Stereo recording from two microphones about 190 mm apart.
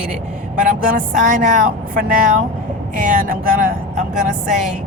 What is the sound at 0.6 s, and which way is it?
Speech, 45° right (ahead or behind).